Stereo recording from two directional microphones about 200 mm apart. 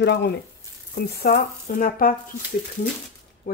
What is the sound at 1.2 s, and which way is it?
Speech, 45° left (ahead or behind).